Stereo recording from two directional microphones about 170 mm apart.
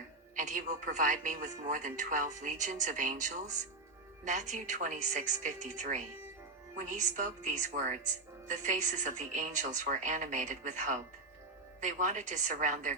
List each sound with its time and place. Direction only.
0.3 s a woman's voice: 45° right (ahead or behind)